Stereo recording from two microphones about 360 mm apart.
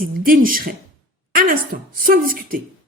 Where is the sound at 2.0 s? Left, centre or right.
Right.